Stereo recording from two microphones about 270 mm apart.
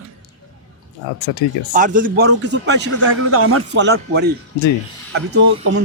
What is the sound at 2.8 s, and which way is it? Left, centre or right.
A man's voice, right.